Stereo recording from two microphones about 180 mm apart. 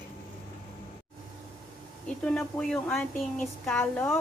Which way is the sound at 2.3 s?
5° left (ahead or behind).